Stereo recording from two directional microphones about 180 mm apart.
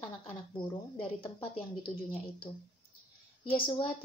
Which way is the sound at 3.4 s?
30° left (ahead or behind).